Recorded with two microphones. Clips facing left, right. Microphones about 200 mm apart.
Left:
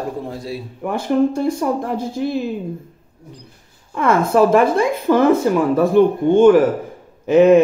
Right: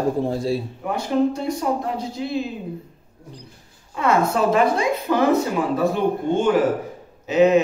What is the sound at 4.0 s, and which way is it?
Speech, 50° left (ahead or behind).